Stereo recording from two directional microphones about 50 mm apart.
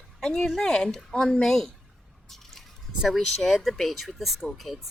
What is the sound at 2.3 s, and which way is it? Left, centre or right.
Drip, centre.